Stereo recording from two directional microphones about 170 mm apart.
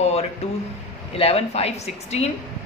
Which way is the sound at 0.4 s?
40° left (ahead or behind).